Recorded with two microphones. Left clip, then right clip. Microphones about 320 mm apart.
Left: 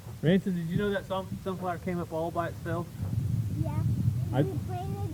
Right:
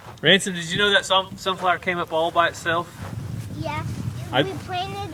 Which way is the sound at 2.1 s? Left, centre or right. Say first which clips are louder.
Right 10 dB; right.